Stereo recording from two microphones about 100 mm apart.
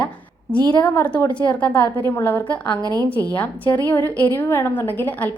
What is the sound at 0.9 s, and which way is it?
A woman's voice, 15° left (ahead or behind).